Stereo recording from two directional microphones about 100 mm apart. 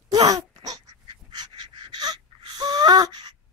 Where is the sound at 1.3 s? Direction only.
45° right (ahead or behind).